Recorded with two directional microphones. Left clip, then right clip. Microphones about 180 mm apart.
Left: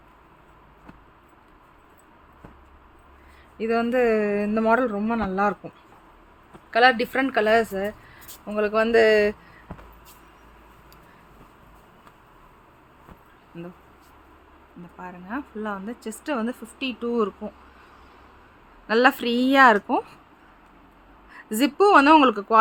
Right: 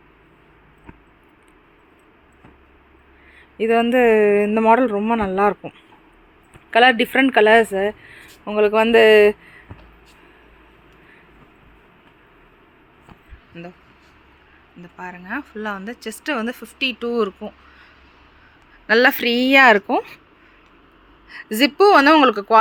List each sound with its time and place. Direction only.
3.6 s speech: 25° right (ahead or behind)
14.9 s a woman's voice: 10° right (ahead or behind)
18.9 s a woman's voice: 15° right (ahead or behind)
21.2 s a woman's voice: 10° right (ahead or behind)